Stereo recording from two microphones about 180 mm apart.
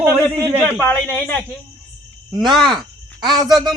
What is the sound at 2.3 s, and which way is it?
Speech, 25° right (ahead or behind).